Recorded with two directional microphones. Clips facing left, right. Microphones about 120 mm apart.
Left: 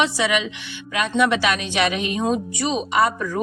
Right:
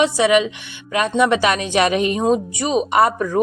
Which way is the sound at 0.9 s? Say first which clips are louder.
Right 3 dB; 40° right (ahead or behind).